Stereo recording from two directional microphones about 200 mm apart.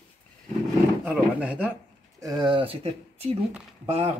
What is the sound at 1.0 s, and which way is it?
Speech, 5° right (ahead or behind).